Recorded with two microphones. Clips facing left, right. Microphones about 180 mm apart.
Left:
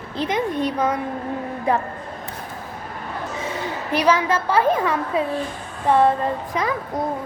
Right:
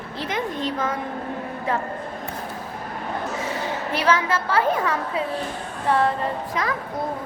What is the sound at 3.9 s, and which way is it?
A woman's voice, 15° left (ahead or behind).